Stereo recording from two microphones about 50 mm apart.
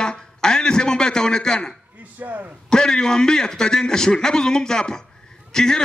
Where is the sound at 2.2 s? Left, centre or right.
Right.